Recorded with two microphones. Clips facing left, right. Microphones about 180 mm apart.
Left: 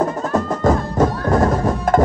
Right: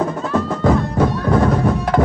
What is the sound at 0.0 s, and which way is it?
Music, 45° left (ahead or behind).